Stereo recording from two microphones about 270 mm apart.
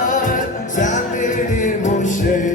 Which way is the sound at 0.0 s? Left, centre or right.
Left.